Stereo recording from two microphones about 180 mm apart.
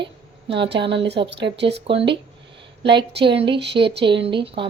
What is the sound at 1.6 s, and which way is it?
Speech, 70° right (ahead or behind).